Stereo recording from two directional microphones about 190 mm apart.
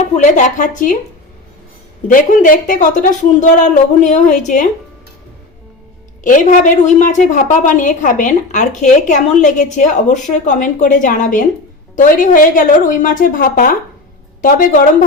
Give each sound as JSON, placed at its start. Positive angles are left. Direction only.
{"t": 0.2, "sound": "a woman's voice", "side_deg": 40}
{"t": 2.1, "sound": "a woman's voice", "side_deg": 45}
{"t": 6.2, "sound": "a woman's voice", "side_deg": 40}